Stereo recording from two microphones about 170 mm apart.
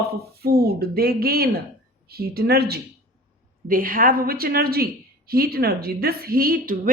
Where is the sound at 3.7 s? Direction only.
55° right (ahead or behind).